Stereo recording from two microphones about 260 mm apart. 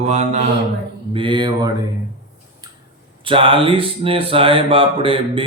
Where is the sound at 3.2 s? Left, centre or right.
Centre.